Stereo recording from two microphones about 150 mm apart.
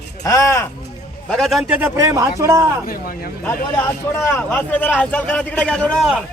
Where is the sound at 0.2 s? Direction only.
20° left (ahead or behind).